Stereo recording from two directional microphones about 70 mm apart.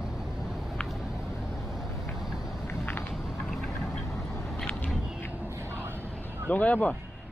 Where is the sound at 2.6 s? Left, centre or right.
Left.